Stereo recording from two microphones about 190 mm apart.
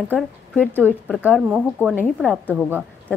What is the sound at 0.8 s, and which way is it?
Speech, 5° left (ahead or behind).